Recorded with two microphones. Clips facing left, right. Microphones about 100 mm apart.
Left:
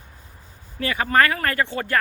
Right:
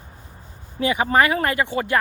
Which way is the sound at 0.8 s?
20° right (ahead or behind).